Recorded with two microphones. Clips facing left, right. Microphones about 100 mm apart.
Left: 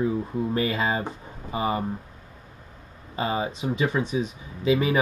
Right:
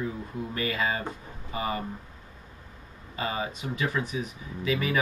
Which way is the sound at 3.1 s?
25° left (ahead or behind).